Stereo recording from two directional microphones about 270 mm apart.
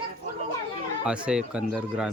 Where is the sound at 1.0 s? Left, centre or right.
Centre.